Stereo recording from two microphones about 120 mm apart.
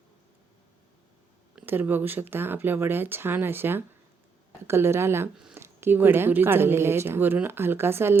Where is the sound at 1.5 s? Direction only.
15° right (ahead or behind).